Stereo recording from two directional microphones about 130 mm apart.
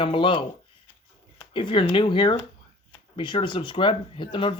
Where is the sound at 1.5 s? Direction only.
40° left (ahead or behind).